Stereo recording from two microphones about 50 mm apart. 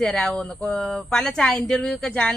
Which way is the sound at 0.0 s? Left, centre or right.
Centre.